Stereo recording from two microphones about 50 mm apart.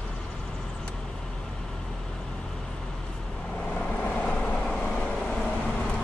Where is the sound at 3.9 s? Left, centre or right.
Left.